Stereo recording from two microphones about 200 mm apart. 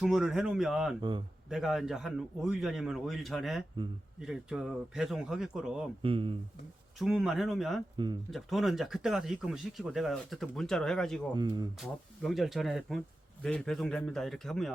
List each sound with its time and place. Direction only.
0.0 s speech: centre (ahead or behind)
6.0 s speech: 25° right (ahead or behind)
7.0 s speech: centre (ahead or behind)
7.9 s speech: 20° right (ahead or behind)
8.3 s speech: centre (ahead or behind)
11.3 s speech: 20° right (ahead or behind)
11.8 s speech: centre (ahead or behind)